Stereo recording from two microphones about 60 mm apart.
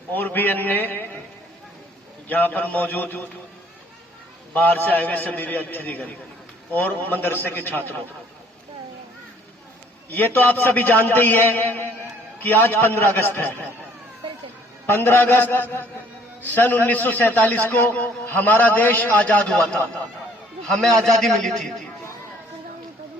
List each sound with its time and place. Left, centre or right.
0.1 s a man's voice: left
2.2 s a man's voice: left
4.5 s a man's voice: left
10.1 s a man's voice: left
14.8 s a man's voice: left
20.8 s a man's voice: centre